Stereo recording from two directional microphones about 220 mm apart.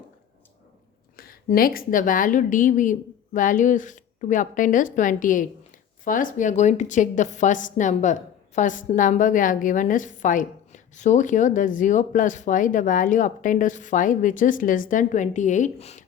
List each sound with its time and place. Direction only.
1.1 s a woman's voice: 40° left (ahead or behind)